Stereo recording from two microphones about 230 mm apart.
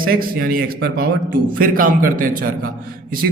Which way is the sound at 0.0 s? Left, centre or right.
Right.